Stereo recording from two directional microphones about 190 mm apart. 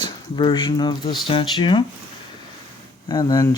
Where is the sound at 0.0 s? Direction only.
25° left (ahead or behind).